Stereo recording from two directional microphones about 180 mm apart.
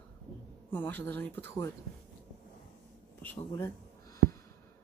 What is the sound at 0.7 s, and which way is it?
Speech, 10° left (ahead or behind).